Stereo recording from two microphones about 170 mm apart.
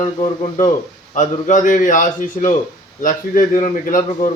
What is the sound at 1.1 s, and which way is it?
Speech, 45° left (ahead or behind).